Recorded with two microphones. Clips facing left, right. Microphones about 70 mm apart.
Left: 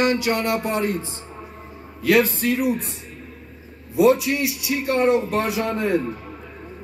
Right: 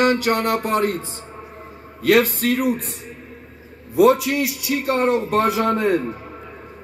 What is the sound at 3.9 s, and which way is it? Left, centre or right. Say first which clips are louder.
Speech: right 2 dB; right.